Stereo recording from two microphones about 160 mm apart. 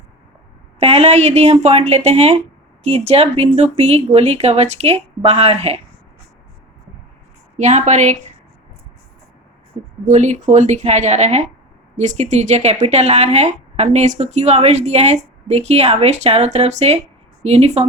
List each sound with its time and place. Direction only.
0.8 s speech: 40° right (ahead or behind)
7.5 s a woman's voice: 45° right (ahead or behind)
10.1 s speech: 50° right (ahead or behind)